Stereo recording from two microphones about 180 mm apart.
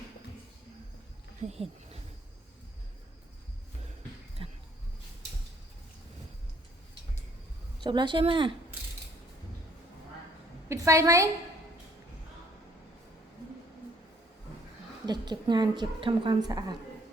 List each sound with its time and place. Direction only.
1.4 s speech: 35° right (ahead or behind)
4.4 s a sound: 30° right (ahead or behind)
7.8 s a woman's voice: 25° right (ahead or behind)
10.7 s a woman's voice: 15° right (ahead or behind)
15.0 s a woman's voice: 25° right (ahead or behind)